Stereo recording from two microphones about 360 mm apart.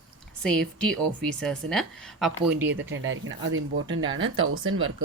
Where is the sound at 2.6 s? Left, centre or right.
Right.